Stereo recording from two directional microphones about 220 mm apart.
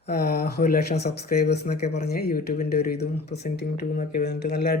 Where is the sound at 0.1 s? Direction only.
45° left (ahead or behind).